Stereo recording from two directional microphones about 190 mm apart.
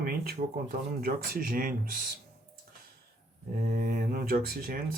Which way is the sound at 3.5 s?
45° right (ahead or behind).